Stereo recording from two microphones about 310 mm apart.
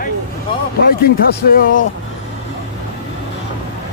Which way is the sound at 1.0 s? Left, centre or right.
Left.